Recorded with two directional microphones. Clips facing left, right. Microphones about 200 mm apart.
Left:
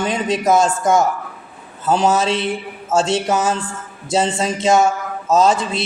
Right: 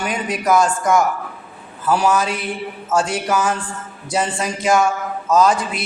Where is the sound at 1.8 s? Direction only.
25° left (ahead or behind).